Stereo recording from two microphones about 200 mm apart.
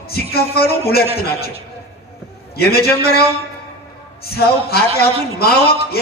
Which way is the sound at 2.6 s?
50° left (ahead or behind).